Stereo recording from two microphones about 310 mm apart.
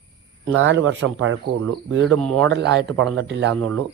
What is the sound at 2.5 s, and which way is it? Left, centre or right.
Speech, right.